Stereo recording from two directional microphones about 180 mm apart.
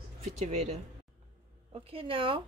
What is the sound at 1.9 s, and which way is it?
Speech, 30° right (ahead or behind).